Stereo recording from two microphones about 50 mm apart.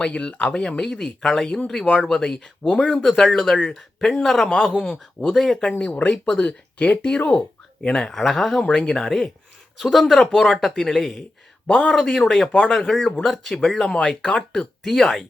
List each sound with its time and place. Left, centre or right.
0.0 s speech: left
5.6 s speech: centre
8.1 s speech: centre